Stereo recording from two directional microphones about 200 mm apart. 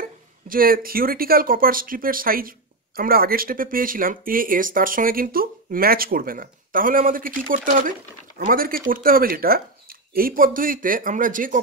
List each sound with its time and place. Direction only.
0.5 s speech: 45° right (ahead or behind)